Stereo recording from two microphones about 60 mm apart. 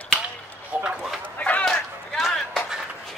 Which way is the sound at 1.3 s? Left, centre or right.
Left.